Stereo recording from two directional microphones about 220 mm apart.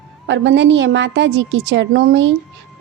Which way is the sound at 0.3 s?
55° right (ahead or behind).